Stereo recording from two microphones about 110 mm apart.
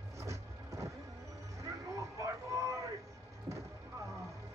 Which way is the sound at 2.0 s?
30° right (ahead or behind).